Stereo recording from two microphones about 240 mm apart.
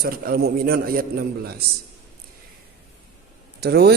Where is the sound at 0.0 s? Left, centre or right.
Right.